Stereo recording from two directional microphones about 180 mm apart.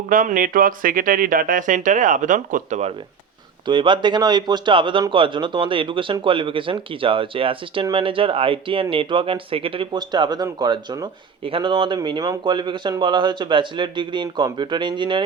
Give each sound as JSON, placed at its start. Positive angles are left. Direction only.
{"t": 0.1, "sound": "speech", "side_deg": -45}
{"t": 3.7, "sound": "a man's voice", "side_deg": -25}